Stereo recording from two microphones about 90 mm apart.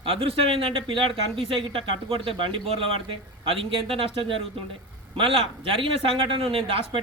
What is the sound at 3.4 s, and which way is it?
Speech, 90° right.